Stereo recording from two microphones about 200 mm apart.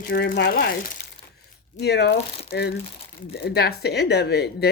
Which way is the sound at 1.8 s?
55° left (ahead or behind).